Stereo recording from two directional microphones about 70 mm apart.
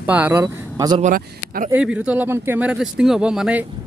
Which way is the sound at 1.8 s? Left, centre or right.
Centre.